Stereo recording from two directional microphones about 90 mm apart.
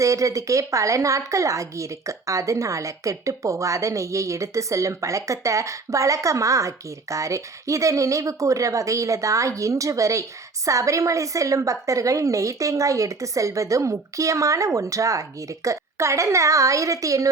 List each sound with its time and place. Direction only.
0.0 s a woman's voice: 35° right (ahead or behind)